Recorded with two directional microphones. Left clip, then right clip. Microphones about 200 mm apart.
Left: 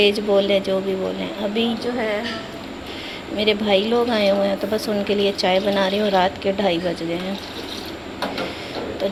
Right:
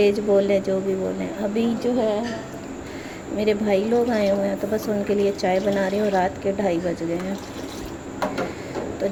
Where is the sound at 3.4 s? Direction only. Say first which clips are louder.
Left 3 dB; 15° right (ahead or behind).